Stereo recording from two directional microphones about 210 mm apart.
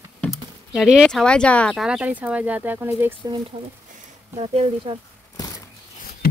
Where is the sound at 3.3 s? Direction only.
25° right (ahead or behind).